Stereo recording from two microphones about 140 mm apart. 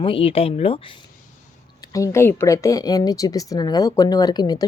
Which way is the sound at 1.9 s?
20° left (ahead or behind).